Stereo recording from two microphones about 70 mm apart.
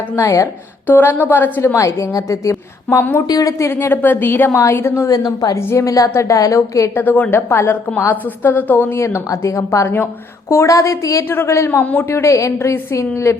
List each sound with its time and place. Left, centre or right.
0.2 s a woman's voice: left
0.9 s a woman's voice: left
1.7 s a woman's voice: left
3.2 s a woman's voice: left
3.6 s a woman's voice: left
5.0 s a woman's voice: left
5.5 s a woman's voice: left
6.9 s a woman's voice: left
9.8 s a woman's voice: left
10.5 s a woman's voice: left
11.3 s a woman's voice: left
11.8 s a woman's voice: left